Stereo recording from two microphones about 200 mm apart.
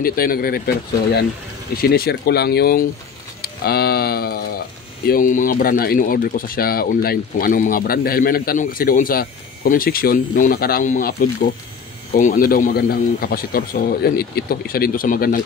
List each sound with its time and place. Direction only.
0.0 s speech: 45° left (ahead or behind)